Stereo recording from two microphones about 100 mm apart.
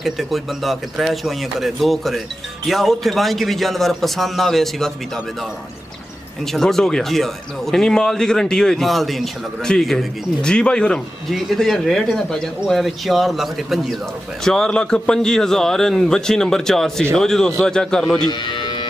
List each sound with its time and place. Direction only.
0.0 s speech: centre (ahead or behind)
6.4 s speech: 5° left (ahead or behind)
18.3 s music: 50° left (ahead or behind)